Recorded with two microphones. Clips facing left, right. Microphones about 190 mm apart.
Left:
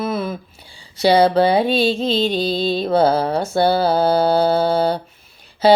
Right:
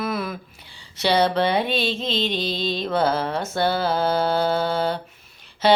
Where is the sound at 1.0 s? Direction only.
35° left (ahead or behind).